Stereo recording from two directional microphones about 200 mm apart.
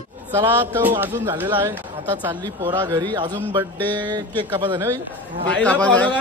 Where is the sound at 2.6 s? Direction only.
25° right (ahead or behind).